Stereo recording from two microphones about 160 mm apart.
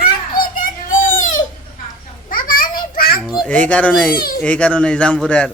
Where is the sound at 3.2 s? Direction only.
Centre (ahead or behind).